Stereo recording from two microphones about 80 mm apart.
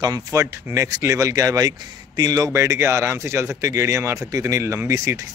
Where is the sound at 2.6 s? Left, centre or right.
Right.